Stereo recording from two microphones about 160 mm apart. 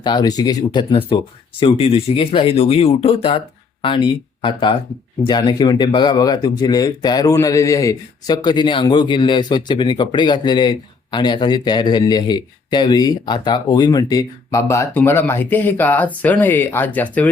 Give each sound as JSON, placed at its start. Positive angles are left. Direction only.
{"t": 0.0, "sound": "speech", "side_deg": 25}